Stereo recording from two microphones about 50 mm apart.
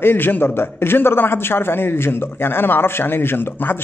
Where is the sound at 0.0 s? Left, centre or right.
Left.